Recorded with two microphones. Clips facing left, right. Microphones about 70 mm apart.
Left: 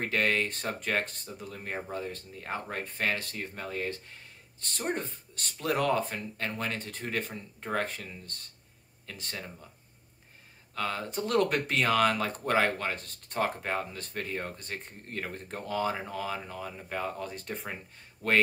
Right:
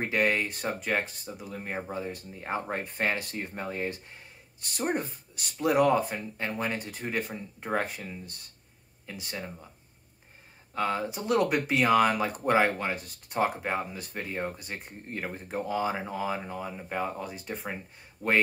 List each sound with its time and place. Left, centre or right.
0.0 s speech: centre
10.7 s speech: right
18.2 s speech: right